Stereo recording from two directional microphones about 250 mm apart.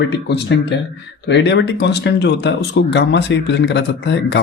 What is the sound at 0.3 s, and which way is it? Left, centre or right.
Speech, left.